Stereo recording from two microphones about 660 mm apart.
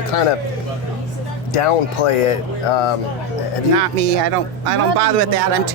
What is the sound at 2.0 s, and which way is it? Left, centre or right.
Speech, left.